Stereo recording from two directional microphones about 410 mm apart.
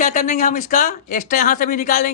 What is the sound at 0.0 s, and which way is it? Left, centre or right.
Speech, centre.